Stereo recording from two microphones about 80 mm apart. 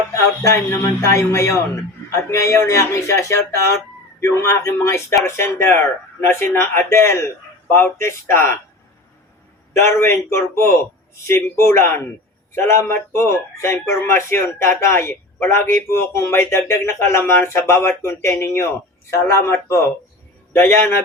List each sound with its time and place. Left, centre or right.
0.1 s speech: left
9.8 s speech: left